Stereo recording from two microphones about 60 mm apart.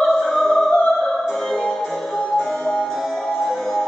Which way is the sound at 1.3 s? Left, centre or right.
Centre.